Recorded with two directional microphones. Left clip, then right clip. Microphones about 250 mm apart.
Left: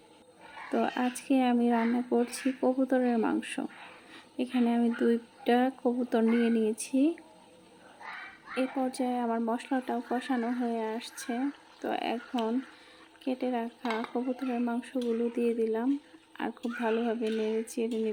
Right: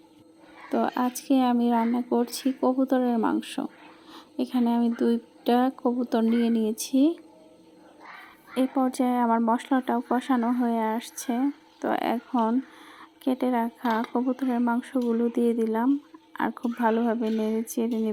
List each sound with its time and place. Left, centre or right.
0.7 s speech: centre
8.5 s speech: right